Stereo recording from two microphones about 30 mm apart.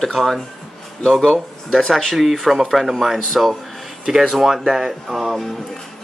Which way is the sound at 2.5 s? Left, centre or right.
Centre.